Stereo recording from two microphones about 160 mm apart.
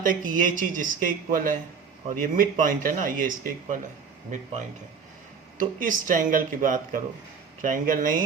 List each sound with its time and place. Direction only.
0.0 s speech: 55° right (ahead or behind)
5.5 s speech: 55° right (ahead or behind)